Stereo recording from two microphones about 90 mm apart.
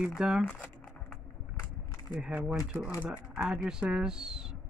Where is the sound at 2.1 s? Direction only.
10° right (ahead or behind).